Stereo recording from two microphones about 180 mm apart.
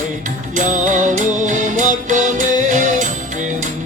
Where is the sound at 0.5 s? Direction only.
45° right (ahead or behind).